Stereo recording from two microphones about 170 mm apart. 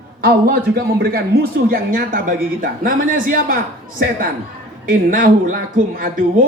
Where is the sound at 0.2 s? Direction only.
60° right (ahead or behind).